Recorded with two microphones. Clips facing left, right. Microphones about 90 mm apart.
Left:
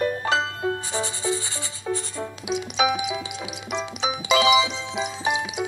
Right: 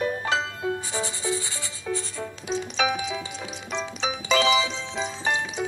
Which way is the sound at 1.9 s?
40° left (ahead or behind).